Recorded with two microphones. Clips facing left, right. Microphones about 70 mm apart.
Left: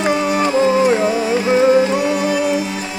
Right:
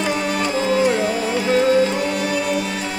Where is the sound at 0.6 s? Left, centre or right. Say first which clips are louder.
Left 4 dB; centre.